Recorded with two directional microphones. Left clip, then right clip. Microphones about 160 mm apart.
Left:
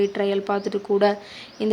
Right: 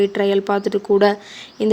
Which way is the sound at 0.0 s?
30° right (ahead or behind).